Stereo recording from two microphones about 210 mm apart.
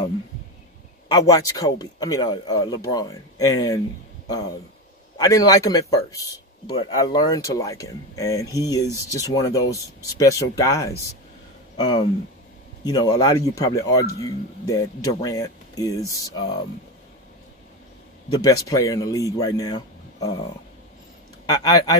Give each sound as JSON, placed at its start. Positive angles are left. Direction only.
{"t": 1.1, "sound": "speech", "side_deg": 15}
{"t": 5.1, "sound": "speech", "side_deg": 15}
{"t": 18.3, "sound": "speech", "side_deg": 15}
{"t": 21.5, "sound": "speech", "side_deg": 15}